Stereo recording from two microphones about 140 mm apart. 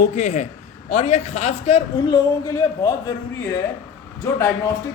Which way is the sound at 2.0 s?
25° left (ahead or behind).